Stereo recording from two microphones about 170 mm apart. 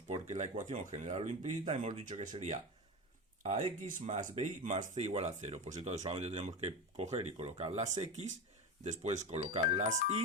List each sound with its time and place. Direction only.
0.1 s speech: 45° right (ahead or behind)